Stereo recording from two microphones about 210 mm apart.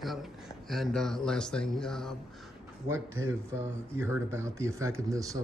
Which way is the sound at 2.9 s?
15° right (ahead or behind).